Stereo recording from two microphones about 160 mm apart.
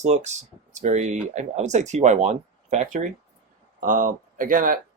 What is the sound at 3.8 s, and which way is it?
Speech, 55° right (ahead or behind).